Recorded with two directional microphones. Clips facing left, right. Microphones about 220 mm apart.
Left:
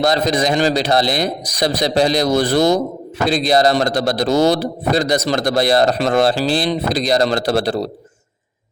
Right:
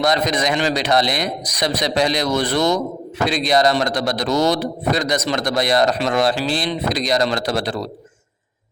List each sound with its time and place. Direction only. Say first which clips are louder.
0.0 s a man's voice: left 3 dB; 30° left (ahead or behind)